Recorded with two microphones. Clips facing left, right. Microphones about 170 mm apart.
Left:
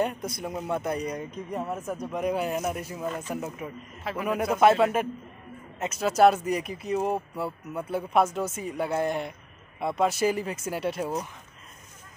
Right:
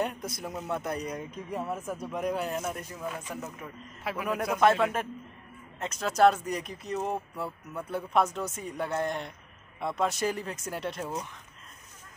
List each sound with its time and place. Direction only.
0.0 s speech: centre (ahead or behind)
4.0 s speech: 5° right (ahead or behind)
4.4 s speech: 10° left (ahead or behind)